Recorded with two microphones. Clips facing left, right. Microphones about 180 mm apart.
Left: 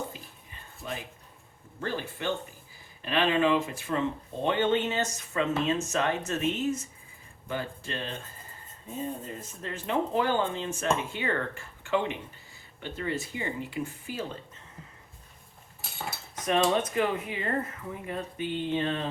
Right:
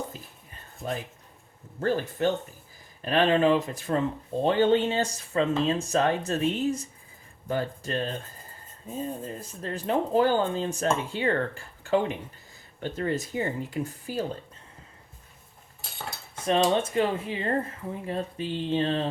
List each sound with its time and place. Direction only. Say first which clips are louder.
1.8 s speech: right 7 dB; 40° right (ahead or behind)
9.4 s speech: right 4 dB; 35° right (ahead or behind)
16.4 s speech: right 2 dB; 25° right (ahead or behind)